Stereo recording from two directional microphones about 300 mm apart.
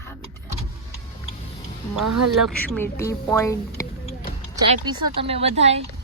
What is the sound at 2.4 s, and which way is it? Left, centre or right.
Speech, centre.